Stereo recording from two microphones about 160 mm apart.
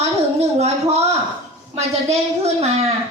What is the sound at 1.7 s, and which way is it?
A woman's voice, 40° right (ahead or behind).